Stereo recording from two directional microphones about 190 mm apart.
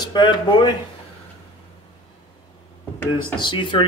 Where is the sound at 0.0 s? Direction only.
25° left (ahead or behind).